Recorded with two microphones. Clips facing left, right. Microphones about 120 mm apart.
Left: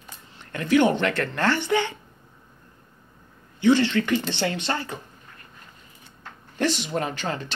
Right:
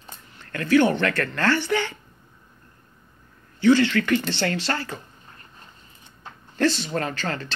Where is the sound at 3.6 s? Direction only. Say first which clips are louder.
Right 1 dB; 20° left (ahead or behind).